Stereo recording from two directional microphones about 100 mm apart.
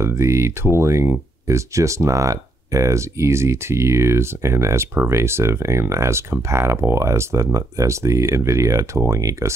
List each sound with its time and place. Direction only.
0.0 s speech: 30° right (ahead or behind)